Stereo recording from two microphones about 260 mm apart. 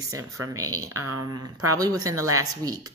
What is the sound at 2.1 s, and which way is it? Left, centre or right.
Speech, right.